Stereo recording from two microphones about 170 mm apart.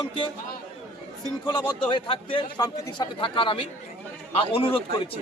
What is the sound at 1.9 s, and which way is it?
A man's voice, 30° left (ahead or behind).